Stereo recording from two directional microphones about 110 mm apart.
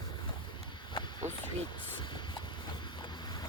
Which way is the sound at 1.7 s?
45° left (ahead or behind).